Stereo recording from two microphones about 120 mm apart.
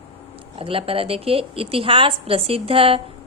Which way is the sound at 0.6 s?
50° right (ahead or behind).